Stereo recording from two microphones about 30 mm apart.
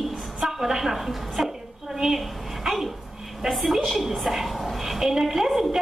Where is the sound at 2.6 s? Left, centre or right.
Centre.